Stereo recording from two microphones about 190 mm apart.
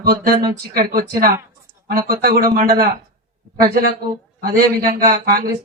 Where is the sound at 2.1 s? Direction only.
55° right (ahead or behind).